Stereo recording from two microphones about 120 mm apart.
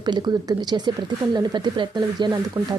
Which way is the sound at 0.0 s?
35° right (ahead or behind).